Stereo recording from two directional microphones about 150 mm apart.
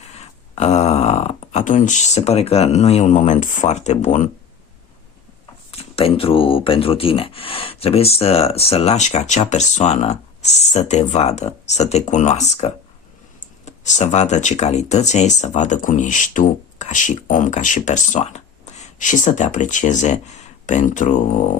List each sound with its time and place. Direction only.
0.0 s speech: 45° left (ahead or behind)
5.7 s speech: 40° left (ahead or behind); by 21.1 s 55° left (ahead or behind)